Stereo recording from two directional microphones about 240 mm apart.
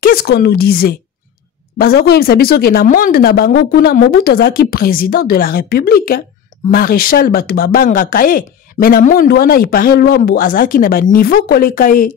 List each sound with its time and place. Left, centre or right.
0.0 s speech: left